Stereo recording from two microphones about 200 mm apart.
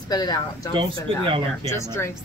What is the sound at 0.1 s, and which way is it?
Speech, 20° left (ahead or behind).